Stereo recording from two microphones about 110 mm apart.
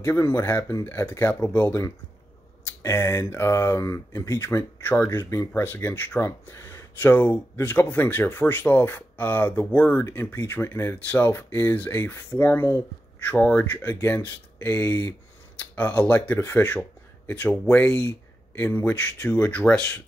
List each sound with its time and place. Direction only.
0.0 s speech: 25° left (ahead or behind)